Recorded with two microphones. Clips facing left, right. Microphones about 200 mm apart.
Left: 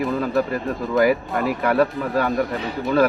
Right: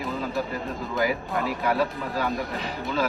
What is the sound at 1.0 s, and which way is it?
Speech, 60° left (ahead or behind).